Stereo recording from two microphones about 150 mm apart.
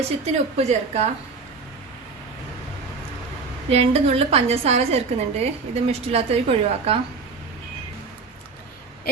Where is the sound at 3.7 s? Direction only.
45° right (ahead or behind).